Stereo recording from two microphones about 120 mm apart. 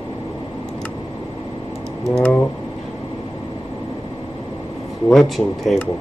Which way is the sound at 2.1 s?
10° left (ahead or behind).